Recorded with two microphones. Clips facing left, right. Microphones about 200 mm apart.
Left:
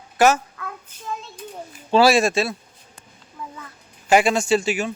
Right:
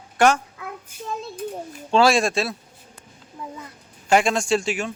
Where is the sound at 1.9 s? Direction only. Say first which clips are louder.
Left 2 dB; 5° left (ahead or behind).